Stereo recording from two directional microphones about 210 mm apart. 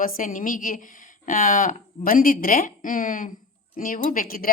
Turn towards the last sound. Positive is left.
turn(degrees=40)  # may be behind; listen again after turning